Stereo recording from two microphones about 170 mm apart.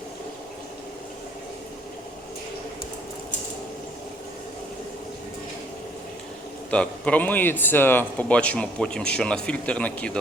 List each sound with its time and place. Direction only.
6.7 s a man's voice: 5° left (ahead or behind)